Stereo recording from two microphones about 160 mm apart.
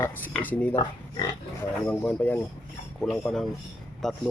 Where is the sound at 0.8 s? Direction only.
30° left (ahead or behind).